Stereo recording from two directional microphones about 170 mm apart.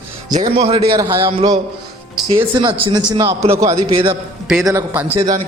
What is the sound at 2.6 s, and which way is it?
A man's voice, 30° right (ahead or behind).